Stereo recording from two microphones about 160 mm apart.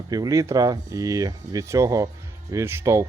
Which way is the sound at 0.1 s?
20° right (ahead or behind).